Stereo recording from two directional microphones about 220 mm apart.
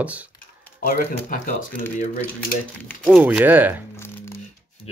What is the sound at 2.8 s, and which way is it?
Speech, centre (ahead or behind).